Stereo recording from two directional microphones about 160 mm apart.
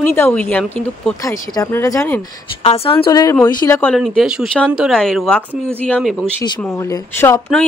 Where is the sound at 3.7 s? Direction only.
10° left (ahead or behind).